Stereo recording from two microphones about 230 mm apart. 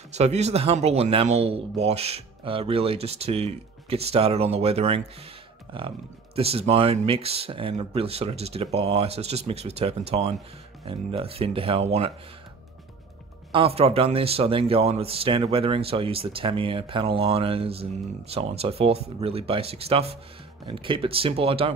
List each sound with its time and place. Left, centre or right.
0.1 s speech: right
13.5 s speech: right